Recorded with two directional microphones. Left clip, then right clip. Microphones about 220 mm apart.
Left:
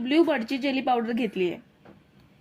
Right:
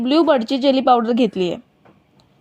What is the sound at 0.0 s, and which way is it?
Speech, 5° right (ahead or behind).